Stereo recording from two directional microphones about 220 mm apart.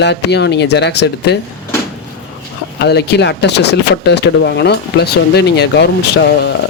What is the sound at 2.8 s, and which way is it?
Speech, 50° left (ahead or behind).